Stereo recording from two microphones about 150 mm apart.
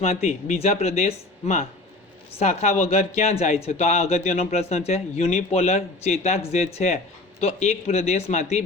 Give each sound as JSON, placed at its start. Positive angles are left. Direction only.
{"t": 0.0, "sound": "speech", "side_deg": 45}